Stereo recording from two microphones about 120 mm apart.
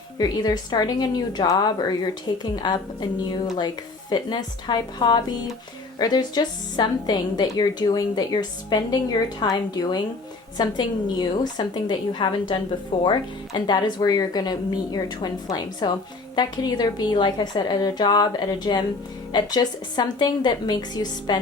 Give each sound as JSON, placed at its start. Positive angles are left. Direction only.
{"t": 0.2, "sound": "speech", "side_deg": 35}